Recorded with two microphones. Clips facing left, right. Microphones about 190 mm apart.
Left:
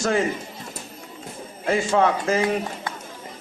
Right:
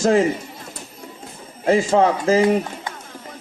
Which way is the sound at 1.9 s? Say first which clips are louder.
Right 2 dB; 35° right (ahead or behind).